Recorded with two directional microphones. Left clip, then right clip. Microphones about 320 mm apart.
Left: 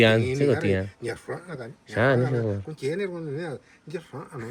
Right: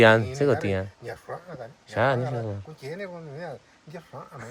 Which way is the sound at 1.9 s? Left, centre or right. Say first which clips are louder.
Left 2 dB; centre.